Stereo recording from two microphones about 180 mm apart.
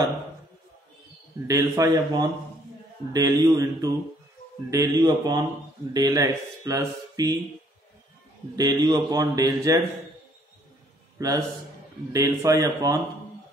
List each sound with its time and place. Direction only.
1.5 s speech: 20° right (ahead or behind)
8.5 s speech: 20° right (ahead or behind)
11.1 s a man's voice: 20° right (ahead or behind)